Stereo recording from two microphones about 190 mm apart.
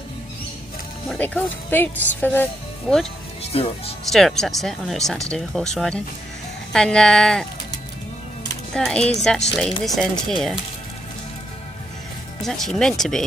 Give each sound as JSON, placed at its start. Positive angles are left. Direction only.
{"t": 1.0, "sound": "speech", "side_deg": 5}
{"t": 3.5, "sound": "speech", "side_deg": 30}
{"t": 4.1, "sound": "speech", "side_deg": 0}
{"t": 8.7, "sound": "speech", "side_deg": 5}
{"t": 12.4, "sound": "speech", "side_deg": 0}